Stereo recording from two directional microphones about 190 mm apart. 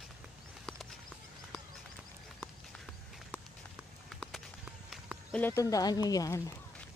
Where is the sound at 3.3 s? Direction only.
5° right (ahead or behind).